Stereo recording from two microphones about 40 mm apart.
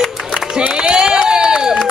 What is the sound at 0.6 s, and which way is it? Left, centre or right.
Run, right.